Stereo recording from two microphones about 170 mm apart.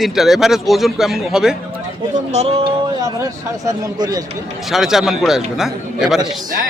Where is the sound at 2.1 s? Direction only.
40° right (ahead or behind).